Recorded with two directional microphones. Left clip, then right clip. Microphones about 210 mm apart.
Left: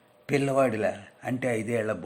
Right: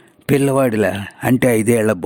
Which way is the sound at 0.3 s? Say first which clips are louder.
Right 9 dB; 55° right (ahead or behind).